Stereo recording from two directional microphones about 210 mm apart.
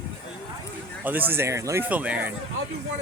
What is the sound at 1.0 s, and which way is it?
Speech, 10° right (ahead or behind).